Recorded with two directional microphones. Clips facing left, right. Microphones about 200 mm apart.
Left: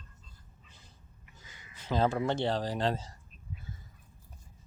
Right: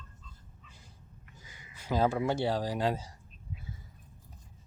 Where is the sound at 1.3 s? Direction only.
10° right (ahead or behind).